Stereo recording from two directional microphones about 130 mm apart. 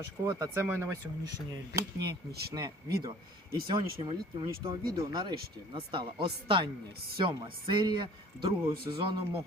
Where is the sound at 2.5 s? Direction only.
30° right (ahead or behind).